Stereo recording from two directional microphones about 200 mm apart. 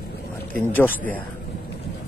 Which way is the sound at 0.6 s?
10° left (ahead or behind).